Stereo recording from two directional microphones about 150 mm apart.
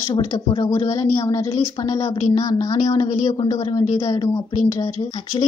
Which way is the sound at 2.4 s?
25° left (ahead or behind).